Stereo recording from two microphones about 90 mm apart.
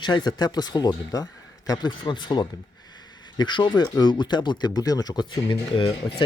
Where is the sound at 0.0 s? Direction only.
55° left (ahead or behind).